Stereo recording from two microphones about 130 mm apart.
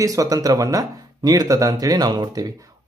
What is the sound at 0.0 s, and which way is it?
Speech, 25° right (ahead or behind).